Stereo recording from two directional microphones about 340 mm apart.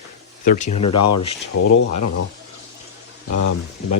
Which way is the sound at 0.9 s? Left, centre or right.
Left.